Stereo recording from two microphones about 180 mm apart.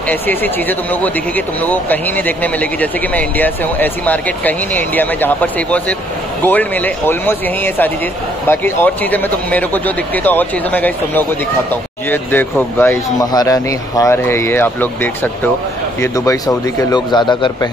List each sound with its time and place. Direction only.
0.1 s a man's voice: 10° left (ahead or behind)